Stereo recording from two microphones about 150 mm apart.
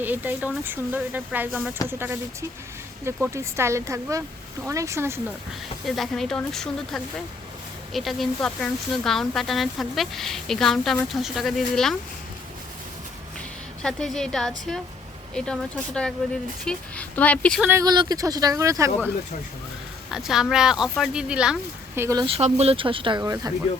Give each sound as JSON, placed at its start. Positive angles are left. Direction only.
{"t": 0.0, "sound": "speech", "side_deg": -10}
{"t": 5.8, "sound": "speech", "side_deg": 0}
{"t": 13.8, "sound": "a woman's voice", "side_deg": 5}
{"t": 17.6, "sound": "speech", "side_deg": -15}
{"t": 17.8, "sound": "speech", "side_deg": -30}
{"t": 20.1, "sound": "speech", "side_deg": -5}
{"t": 21.9, "sound": "speech", "side_deg": -15}
{"t": 22.4, "sound": "speech", "side_deg": -45}
{"t": 23.2, "sound": "speech", "side_deg": -20}